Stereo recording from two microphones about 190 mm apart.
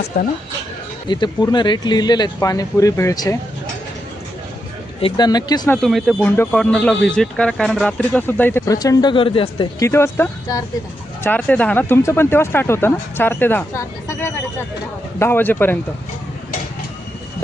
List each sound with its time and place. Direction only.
0.1 s speech: 50° left (ahead or behind)
1.0 s speech: 25° left (ahead or behind)
4.9 s speech: 25° left (ahead or behind)
5.7 s speech: centre (ahead or behind); by 9.6 s 30° left (ahead or behind)
9.8 s speech: 15° left (ahead or behind)